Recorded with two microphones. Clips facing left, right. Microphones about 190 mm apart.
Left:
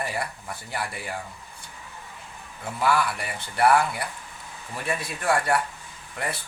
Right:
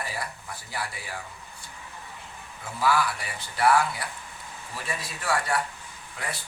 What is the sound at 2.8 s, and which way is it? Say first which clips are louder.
Speech: left 1 dB; 60° left (ahead or behind).